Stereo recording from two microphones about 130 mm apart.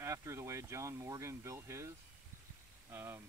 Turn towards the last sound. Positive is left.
turn(degrees=-20)  # may be behind; listen again after turning